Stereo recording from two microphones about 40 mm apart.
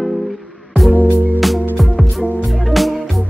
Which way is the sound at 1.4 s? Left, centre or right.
Centre.